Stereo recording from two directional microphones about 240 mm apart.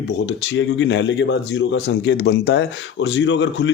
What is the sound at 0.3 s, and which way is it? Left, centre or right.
Speech, left.